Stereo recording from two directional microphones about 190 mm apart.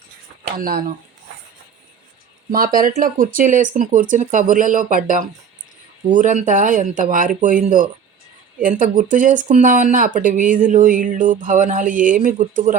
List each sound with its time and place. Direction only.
0.4 s speech: 50° right (ahead or behind)
2.5 s speech: 50° right (ahead or behind)